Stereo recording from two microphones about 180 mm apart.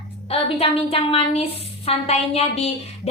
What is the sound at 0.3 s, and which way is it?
A woman's voice, 30° left (ahead or behind).